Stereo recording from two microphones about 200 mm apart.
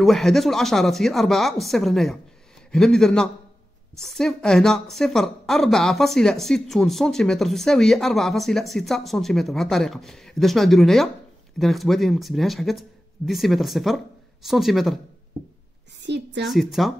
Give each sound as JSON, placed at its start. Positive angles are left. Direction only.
{"t": 0.0, "sound": "a woman's voice", "side_deg": 0}
{"t": 16.1, "sound": "a woman's voice", "side_deg": -60}
{"t": 16.4, "sound": "a woman's voice", "side_deg": 0}